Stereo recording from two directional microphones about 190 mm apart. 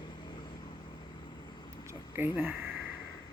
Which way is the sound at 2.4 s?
10° right (ahead or behind).